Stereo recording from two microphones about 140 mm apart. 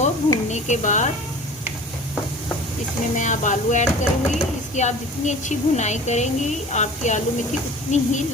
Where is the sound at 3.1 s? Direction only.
60° left (ahead or behind).